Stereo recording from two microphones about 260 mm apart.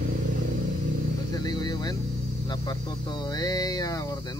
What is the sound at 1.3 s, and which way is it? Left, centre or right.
Speech, centre.